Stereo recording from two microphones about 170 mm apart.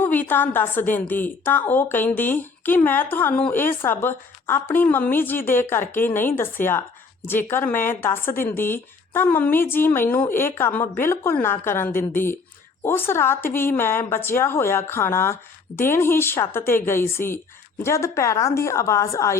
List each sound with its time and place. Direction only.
0.0 s speech: 10° left (ahead or behind)